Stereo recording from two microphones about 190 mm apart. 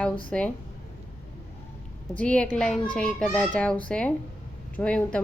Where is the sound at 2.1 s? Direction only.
5° left (ahead or behind).